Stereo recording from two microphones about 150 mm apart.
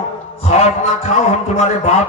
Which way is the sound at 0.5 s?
50° left (ahead or behind).